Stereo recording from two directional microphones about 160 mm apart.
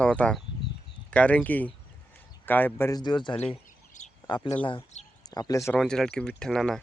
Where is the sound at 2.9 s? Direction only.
25° left (ahead or behind).